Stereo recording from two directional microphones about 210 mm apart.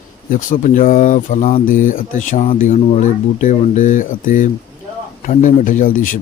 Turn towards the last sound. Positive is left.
turn(degrees=40)  # may be behind; listen again after turning